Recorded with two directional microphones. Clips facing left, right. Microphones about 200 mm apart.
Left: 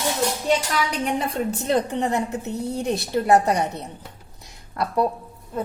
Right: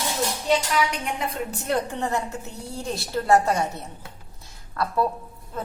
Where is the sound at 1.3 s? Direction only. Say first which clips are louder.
Left 4 dB; 20° left (ahead or behind).